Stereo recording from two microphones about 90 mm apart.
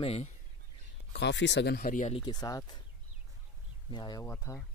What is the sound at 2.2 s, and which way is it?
Speech, 50° left (ahead or behind).